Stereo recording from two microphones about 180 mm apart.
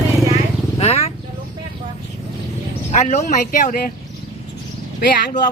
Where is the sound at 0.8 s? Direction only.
35° left (ahead or behind).